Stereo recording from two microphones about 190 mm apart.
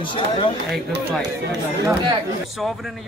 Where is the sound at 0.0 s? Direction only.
25° left (ahead or behind).